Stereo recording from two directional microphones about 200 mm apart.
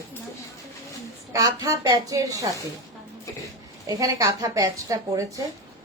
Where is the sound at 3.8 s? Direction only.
15° right (ahead or behind).